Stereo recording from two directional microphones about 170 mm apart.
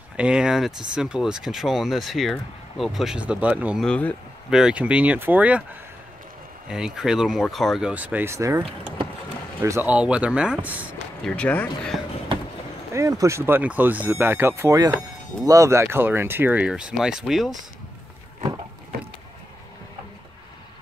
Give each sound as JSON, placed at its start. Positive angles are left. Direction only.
{"t": 0.2, "sound": "speech", "side_deg": -5}
{"t": 3.8, "sound": "speech", "side_deg": 5}
{"t": 6.7, "sound": "speech", "side_deg": -5}
{"t": 11.2, "sound": "speech", "side_deg": 5}
{"t": 12.9, "sound": "speech", "side_deg": -15}
{"t": 18.9, "sound": "vehicle", "side_deg": -65}